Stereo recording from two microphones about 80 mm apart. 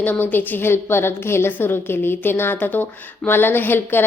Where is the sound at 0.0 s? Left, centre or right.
Left.